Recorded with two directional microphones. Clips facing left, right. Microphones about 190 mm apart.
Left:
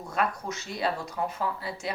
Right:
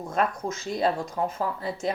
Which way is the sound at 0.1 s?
45° right (ahead or behind).